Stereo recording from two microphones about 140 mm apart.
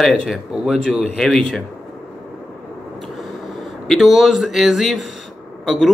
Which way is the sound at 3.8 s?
Centre (ahead or behind).